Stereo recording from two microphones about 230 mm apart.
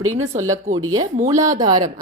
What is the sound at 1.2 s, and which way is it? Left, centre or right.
Speech, centre.